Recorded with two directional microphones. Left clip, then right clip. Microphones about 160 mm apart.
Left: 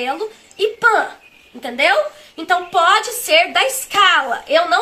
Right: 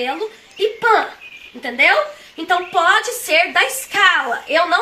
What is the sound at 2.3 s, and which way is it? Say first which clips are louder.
Speech: left 1 dB; 15° left (ahead or behind).